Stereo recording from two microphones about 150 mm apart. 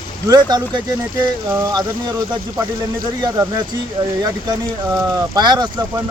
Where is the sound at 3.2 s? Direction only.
20° right (ahead or behind).